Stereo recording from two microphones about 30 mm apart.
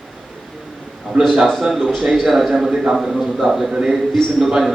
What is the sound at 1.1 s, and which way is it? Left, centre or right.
Speech, right.